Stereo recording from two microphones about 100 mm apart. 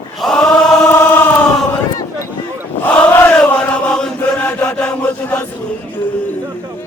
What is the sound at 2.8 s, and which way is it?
Chant, 15° left (ahead or behind).